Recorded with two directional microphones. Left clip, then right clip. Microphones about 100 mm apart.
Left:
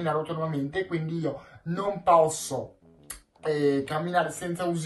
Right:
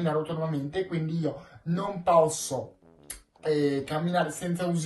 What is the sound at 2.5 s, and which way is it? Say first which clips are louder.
Speech: even; centre (ahead or behind).